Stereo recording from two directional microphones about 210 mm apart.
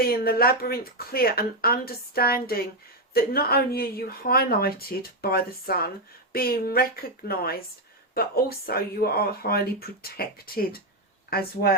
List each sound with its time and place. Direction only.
0.0 s speech: 45° left (ahead or behind)